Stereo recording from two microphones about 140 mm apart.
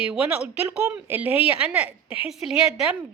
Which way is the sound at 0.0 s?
5° right (ahead or behind).